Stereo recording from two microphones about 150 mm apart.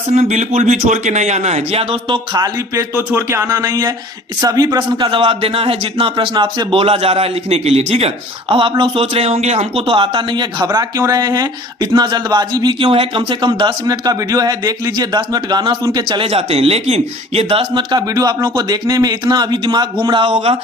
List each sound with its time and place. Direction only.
0.1 s a man's voice: 50° right (ahead or behind)